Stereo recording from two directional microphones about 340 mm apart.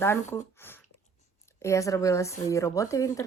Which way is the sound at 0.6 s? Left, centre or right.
Centre.